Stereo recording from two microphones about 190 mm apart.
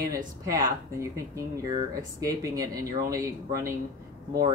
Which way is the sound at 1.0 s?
20° right (ahead or behind).